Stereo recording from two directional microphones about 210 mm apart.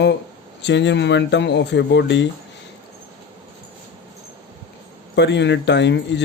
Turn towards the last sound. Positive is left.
turn(degrees=55)  # may be behind; listen again after turning